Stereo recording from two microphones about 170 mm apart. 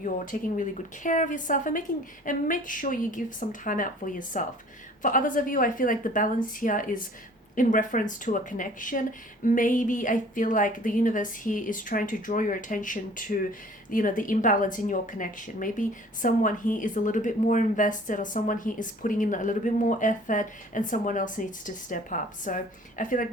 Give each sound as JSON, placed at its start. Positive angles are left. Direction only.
{"t": 0.0, "sound": "speech", "side_deg": 50}